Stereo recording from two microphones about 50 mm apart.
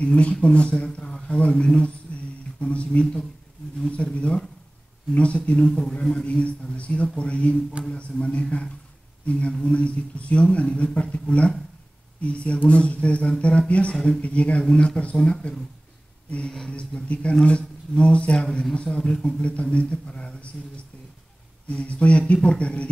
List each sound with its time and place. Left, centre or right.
0.0 s speech: left
0.9 s a sound: centre
1.4 s speech: centre
2.1 s a sound: left
2.6 s speech: left
6.1 s speech: left
16.4 s speech: centre
16.7 s speech: left